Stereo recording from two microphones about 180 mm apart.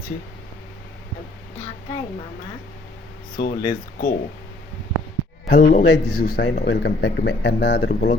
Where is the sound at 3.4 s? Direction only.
50° left (ahead or behind).